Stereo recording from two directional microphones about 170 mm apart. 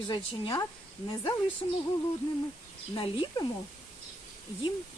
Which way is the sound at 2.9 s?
30° left (ahead or behind).